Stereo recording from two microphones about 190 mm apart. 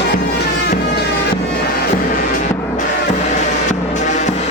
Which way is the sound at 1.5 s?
55° left (ahead or behind).